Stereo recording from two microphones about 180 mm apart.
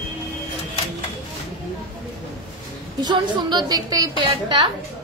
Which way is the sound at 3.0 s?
25° right (ahead or behind).